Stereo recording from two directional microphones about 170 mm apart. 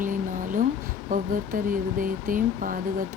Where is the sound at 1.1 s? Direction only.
55° right (ahead or behind).